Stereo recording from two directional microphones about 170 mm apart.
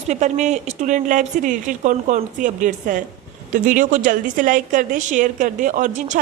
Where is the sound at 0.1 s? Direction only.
45° right (ahead or behind).